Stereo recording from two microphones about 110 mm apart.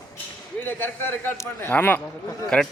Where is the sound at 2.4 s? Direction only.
5° left (ahead or behind).